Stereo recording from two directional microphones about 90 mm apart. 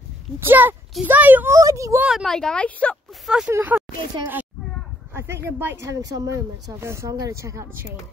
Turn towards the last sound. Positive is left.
turn(degrees=-30)  # may be behind; listen again after turning